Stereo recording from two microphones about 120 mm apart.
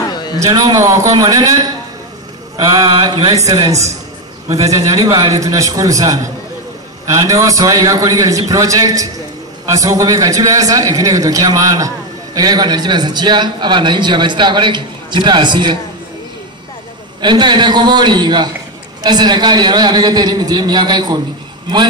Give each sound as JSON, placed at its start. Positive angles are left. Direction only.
{"t": 0.1, "sound": "a sound", "side_deg": 35}
{"t": 0.5, "sound": "a man's voice", "side_deg": -30}
{"t": 3.4, "sound": "a man's voice", "side_deg": -35}
{"t": 17.2, "sound": "a man's voice", "side_deg": -40}